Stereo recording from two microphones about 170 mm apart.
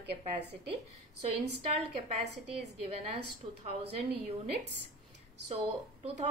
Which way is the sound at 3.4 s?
40° right (ahead or behind).